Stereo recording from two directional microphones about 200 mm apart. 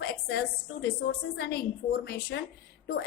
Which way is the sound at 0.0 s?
50° left (ahead or behind).